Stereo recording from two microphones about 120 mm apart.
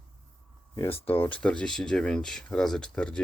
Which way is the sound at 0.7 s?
15° left (ahead or behind).